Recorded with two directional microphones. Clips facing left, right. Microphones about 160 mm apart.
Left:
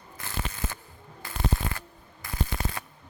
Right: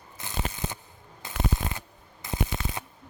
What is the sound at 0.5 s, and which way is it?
Ratchet, 20° right (ahead or behind).